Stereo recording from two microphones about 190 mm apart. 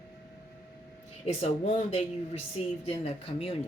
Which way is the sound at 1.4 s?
35° left (ahead or behind).